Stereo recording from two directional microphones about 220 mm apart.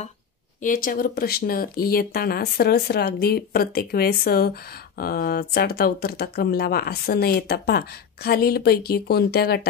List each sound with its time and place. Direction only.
0.6 s speech: 40° left (ahead or behind)